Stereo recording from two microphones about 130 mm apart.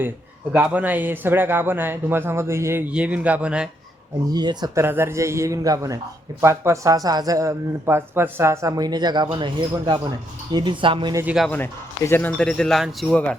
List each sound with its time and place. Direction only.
0.5 s a man's voice: 10° right (ahead or behind)
4.3 s speech: 30° right (ahead or behind)
4.8 s a man's voice: 20° right (ahead or behind); by 11.1 s 40° right (ahead or behind)
11.4 s speech: 15° left (ahead or behind)